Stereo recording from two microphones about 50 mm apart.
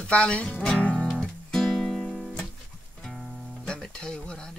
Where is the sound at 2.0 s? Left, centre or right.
Centre.